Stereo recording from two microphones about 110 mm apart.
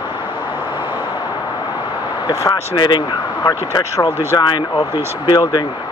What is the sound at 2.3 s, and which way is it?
Speech, 40° left (ahead or behind).